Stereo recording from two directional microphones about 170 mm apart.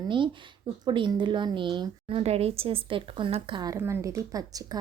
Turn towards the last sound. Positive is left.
turn(degrees=-20)  # may be behind; listen again after turning